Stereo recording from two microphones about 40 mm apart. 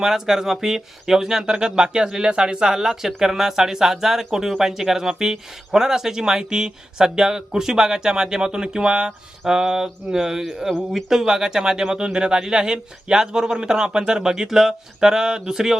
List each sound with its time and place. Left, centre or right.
0.0 s speech: centre